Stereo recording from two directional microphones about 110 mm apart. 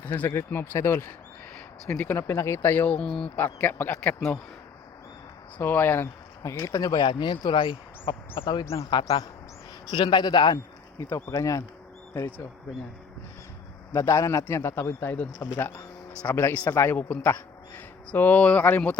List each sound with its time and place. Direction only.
0.0 s a man's voice: 15° left (ahead or behind)
5.5 s a man's voice: 20° left (ahead or behind); by 10.6 s 40° left (ahead or behind)
10.9 s a man's voice: 25° left (ahead or behind)
13.9 s a man's voice: 30° left (ahead or behind)